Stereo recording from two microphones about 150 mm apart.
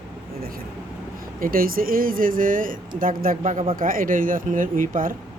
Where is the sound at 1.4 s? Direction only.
70° right (ahead or behind).